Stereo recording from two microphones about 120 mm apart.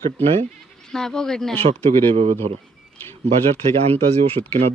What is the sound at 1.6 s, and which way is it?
Speech, 55° right (ahead or behind).